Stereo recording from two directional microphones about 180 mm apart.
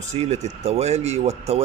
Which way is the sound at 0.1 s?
35° right (ahead or behind).